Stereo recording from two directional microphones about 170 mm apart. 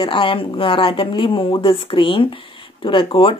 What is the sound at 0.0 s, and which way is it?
Speech, 30° left (ahead or behind).